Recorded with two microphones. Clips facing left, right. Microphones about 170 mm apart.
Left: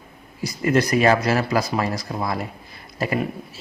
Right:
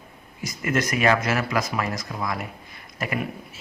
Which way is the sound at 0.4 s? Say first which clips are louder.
Left 5 dB; 35° left (ahead or behind).